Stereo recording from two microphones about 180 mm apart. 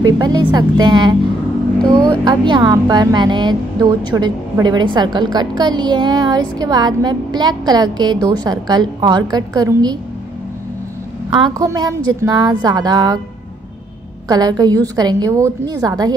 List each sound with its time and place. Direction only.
0.0 s a woman's voice: 20° right (ahead or behind)
11.3 s a woman's voice: 20° right (ahead or behind)
14.2 s a woman's voice: 20° right (ahead or behind)